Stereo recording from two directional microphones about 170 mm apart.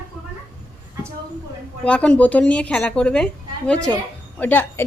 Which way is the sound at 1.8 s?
5° left (ahead or behind).